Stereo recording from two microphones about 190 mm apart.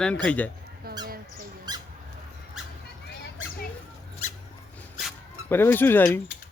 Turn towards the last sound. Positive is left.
turn(degrees=10)  # may be behind; listen again after turning